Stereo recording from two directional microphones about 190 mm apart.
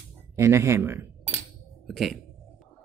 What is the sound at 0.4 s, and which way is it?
Speech, 15° right (ahead or behind).